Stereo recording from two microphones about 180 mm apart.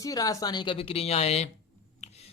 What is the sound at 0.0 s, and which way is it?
Speech, 20° left (ahead or behind).